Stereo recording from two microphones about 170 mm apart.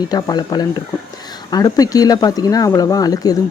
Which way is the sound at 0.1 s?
25° left (ahead or behind).